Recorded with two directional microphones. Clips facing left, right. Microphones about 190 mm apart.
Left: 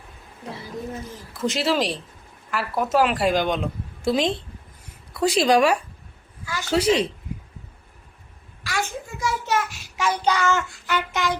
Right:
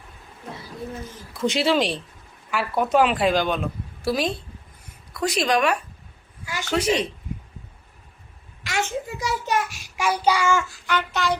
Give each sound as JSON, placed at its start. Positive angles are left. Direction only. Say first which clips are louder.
{"t": 1.3, "sound": "a woman's voice", "louder": "right 2 dB", "side_deg": 0}
{"t": 6.4, "sound": "a woman's voice", "louder": "left 1 dB", "side_deg": -15}
{"t": 6.7, "sound": "a woman's voice", "louder": "left 3 dB", "side_deg": 30}
{"t": 8.6, "sound": "a sound", "louder": "right 2 dB", "side_deg": -20}
{"t": 9.5, "sound": "child singing", "louder": "even", "side_deg": -15}
{"t": 10.8, "sound": "a woman's voice", "louder": "left 1 dB", "side_deg": 10}